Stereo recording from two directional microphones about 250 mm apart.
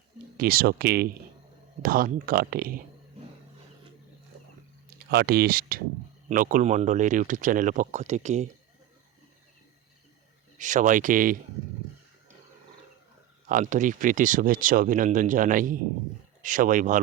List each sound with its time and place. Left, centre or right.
0.3 s speech: right
5.1 s speech: right
10.6 s speech: right
13.5 s speech: right